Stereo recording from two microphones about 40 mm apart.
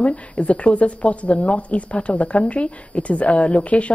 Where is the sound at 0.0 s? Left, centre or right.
Left.